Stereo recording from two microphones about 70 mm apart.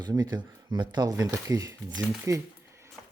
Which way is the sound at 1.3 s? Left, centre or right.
Right.